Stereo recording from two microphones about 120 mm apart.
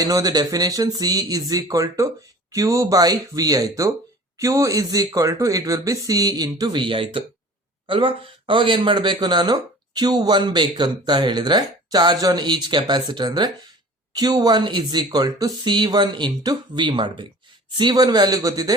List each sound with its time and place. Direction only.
0.0 s speech: 30° right (ahead or behind)